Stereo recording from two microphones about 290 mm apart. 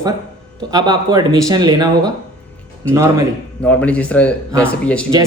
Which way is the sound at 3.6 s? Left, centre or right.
Centre.